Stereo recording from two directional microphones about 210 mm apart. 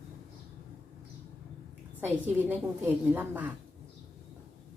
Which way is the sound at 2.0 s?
10° right (ahead or behind).